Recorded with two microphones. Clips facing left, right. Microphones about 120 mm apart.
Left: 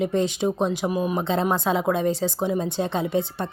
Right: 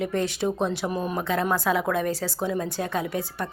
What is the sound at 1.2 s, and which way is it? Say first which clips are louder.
A woman's voice: left 2 dB; 25° left (ahead or behind).